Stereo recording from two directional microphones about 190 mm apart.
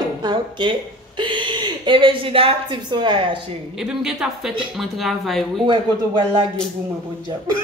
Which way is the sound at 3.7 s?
5° right (ahead or behind).